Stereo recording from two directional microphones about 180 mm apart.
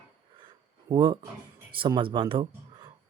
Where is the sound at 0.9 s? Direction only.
25° right (ahead or behind).